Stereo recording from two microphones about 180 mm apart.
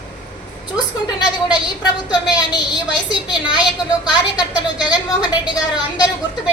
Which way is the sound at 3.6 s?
25° left (ahead or behind).